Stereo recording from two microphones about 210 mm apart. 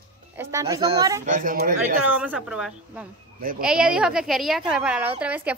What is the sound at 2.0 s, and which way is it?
A woman's voice, 5° right (ahead or behind).